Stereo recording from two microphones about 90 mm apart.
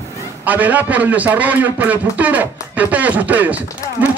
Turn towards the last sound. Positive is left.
turn(degrees=-15)  # may be behind; listen again after turning